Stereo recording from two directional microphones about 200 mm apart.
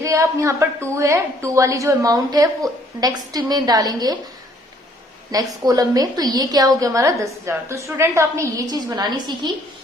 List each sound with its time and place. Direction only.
0.0 s a woman's voice: 15° right (ahead or behind)
5.3 s a woman's voice: 20° right (ahead or behind)